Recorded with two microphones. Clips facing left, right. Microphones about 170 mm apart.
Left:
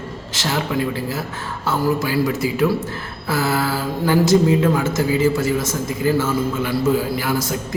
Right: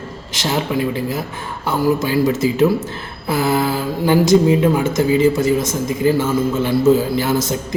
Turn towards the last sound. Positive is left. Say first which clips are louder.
# right 4 dB
turn(degrees=-20)  # may be behind; listen again after turning